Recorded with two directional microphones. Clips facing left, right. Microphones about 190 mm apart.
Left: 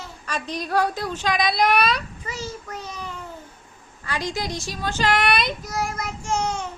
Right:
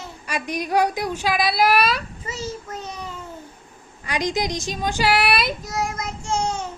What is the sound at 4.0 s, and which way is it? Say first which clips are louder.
A woman's voice: right 4 dB; 15° right (ahead or behind).